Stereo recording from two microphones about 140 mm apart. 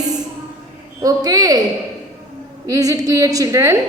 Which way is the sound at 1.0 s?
25° right (ahead or behind).